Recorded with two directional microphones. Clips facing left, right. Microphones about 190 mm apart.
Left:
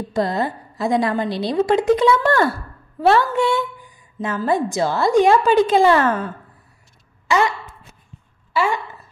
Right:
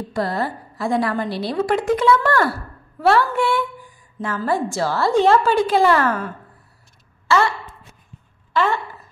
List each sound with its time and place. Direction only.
0.1 s a woman's voice: 20° left (ahead or behind)
8.5 s speech: 10° left (ahead or behind)